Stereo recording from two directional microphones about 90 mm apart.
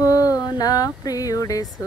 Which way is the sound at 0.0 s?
40° left (ahead or behind).